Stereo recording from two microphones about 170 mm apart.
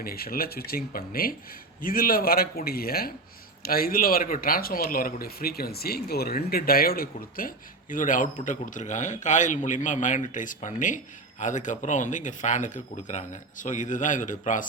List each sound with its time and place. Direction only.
0.0 s a man's voice: 60° left (ahead or behind)